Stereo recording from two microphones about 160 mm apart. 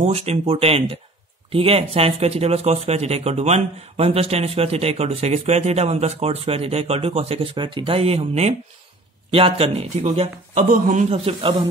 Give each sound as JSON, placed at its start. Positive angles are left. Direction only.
{"t": 0.0, "sound": "speech", "side_deg": -40}